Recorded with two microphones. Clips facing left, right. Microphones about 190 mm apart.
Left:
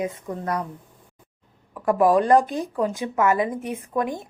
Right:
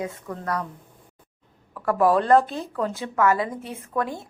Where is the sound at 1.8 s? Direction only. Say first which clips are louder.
Left 2 dB; 15° left (ahead or behind).